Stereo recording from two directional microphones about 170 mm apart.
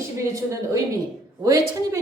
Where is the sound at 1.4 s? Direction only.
20° right (ahead or behind).